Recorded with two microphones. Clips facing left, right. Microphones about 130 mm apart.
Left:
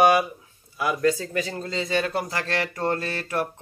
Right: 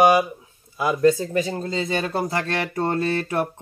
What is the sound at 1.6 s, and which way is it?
Speech, 35° right (ahead or behind).